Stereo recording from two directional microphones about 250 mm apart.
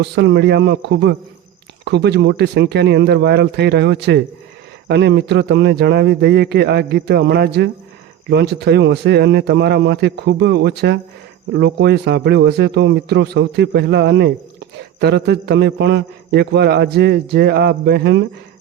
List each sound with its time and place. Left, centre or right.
0.0 s a man's voice: right